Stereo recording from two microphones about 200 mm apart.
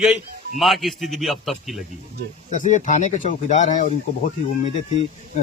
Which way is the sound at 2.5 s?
40° left (ahead or behind).